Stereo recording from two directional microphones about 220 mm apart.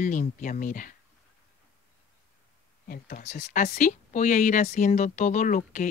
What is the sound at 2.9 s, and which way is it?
Speech, 40° left (ahead or behind).